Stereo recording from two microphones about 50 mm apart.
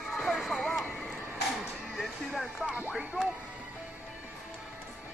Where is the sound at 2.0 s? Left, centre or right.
Centre.